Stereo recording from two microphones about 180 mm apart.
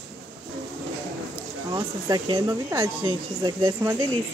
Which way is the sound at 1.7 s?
20° right (ahead or behind).